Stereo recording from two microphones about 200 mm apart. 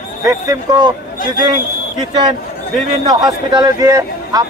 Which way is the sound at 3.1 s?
20° right (ahead or behind).